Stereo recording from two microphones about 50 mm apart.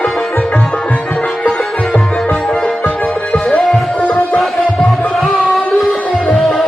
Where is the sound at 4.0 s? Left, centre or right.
Left.